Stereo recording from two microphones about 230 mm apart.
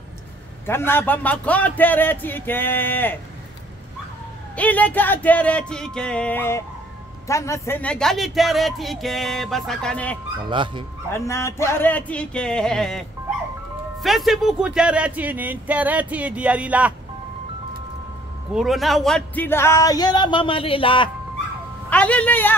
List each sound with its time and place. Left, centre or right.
0.7 s speech: centre
4.6 s speech: centre
10.5 s speech: right
11.1 s speech: centre
14.0 s speech: centre
18.5 s speech: centre; by 21.1 s left
21.8 s a sound: centre